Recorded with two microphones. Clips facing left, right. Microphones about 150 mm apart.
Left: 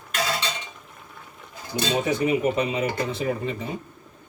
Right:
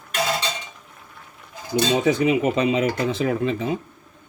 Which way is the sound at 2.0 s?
90° right.